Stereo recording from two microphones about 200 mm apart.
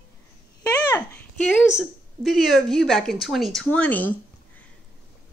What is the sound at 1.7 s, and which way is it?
A woman's voice, centre (ahead or behind).